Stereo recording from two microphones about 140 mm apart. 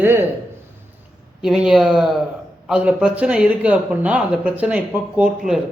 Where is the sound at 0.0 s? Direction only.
15° right (ahead or behind).